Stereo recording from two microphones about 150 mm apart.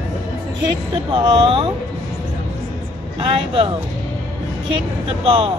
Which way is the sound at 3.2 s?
35° right (ahead or behind).